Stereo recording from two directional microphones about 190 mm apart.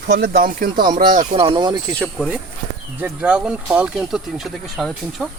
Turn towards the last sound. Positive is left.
turn(degrees=0)  # may be behind; listen again after turning